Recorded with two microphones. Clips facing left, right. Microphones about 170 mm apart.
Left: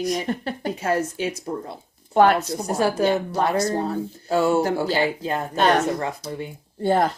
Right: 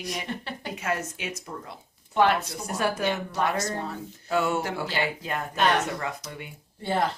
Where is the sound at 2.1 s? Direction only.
45° left (ahead or behind).